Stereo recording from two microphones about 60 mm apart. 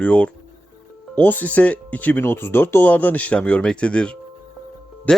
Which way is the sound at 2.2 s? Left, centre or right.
Left.